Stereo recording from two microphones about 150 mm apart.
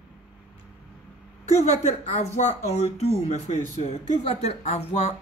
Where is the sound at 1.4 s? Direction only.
50° left (ahead or behind).